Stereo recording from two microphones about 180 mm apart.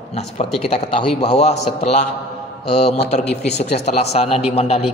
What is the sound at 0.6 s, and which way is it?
Speech, 30° left (ahead or behind).